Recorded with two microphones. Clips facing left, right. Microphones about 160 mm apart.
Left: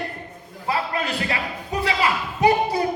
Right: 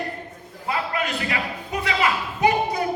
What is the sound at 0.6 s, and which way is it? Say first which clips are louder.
Speech: left 1 dB; 30° left (ahead or behind).